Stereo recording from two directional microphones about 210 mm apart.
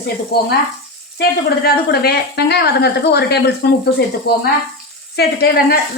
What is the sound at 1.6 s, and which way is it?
A woman's voice, 50° left (ahead or behind).